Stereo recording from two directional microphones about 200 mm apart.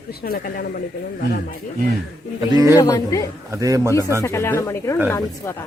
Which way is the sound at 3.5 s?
15° right (ahead or behind).